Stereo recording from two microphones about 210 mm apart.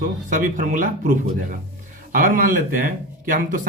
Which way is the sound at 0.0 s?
40° right (ahead or behind).